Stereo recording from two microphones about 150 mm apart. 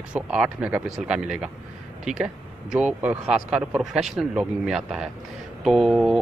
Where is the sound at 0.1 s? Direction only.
5° right (ahead or behind).